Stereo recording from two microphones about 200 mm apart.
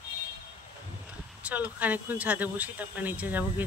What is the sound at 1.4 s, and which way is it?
Speech, 10° right (ahead or behind).